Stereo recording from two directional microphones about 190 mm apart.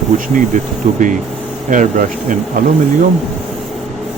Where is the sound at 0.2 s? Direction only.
45° right (ahead or behind).